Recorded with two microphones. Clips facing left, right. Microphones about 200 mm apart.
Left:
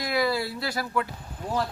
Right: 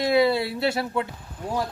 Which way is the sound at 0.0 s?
25° right (ahead or behind).